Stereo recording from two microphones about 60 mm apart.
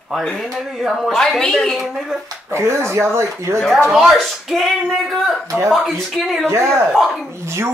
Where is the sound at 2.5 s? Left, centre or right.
Right.